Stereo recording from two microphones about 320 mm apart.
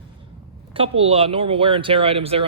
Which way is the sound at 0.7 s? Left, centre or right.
Centre.